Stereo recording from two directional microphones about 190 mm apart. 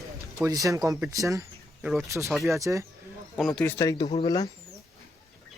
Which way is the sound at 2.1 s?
15° right (ahead or behind).